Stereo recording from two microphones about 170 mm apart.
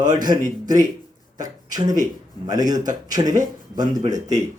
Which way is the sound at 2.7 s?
25° right (ahead or behind).